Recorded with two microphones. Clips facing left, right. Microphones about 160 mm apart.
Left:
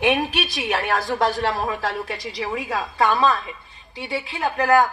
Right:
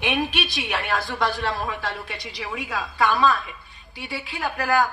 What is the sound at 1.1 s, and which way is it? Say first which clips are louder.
Speech: left 4 dB; 40° left (ahead or behind).